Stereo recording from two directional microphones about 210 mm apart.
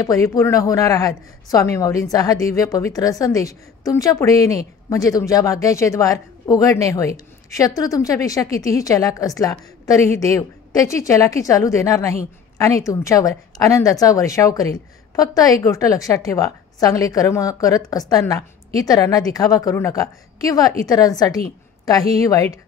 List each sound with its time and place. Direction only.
0.0 s a woman's voice: 15° left (ahead or behind)